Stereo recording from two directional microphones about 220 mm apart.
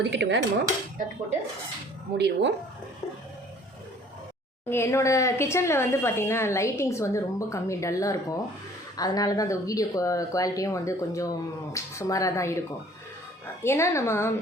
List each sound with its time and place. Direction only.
0.0 s dishes: 50° right (ahead or behind)
2.1 s dishes: 50° right (ahead or behind)
4.7 s speech: 10° left (ahead or behind)